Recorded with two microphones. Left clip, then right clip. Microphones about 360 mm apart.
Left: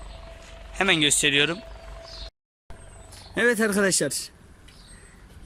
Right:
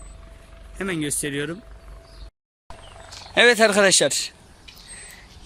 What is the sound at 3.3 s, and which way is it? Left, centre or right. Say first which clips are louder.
Speech: right 7 dB; centre.